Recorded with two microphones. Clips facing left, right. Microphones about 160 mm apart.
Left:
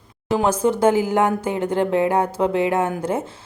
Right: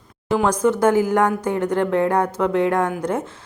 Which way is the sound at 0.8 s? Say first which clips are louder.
Even; 30° left (ahead or behind).